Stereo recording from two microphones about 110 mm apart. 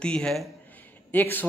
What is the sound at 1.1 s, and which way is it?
Speech, 15° left (ahead or behind).